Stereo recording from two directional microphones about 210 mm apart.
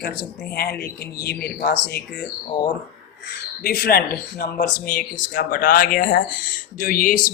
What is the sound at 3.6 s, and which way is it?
Speech, 45° left (ahead or behind).